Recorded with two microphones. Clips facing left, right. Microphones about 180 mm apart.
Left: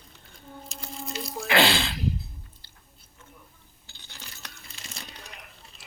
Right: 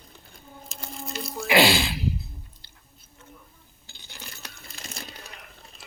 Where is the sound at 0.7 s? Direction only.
50° right (ahead or behind).